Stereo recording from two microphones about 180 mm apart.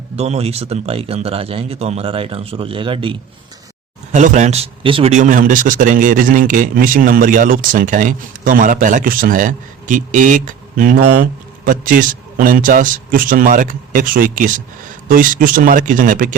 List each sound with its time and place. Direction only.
0.2 s speech: 35° right (ahead or behind)
4.1 s speech: 45° right (ahead or behind)
5.1 s a man's voice: 45° right (ahead or behind)